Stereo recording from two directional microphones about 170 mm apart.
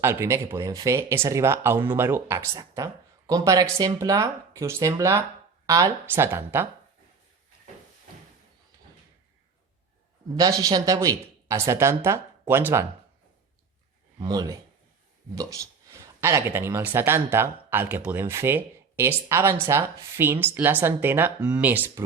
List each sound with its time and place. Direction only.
0.0 s speech: 15° right (ahead or behind)
10.3 s speech: 20° right (ahead or behind)
14.2 s speech: 25° right (ahead or behind)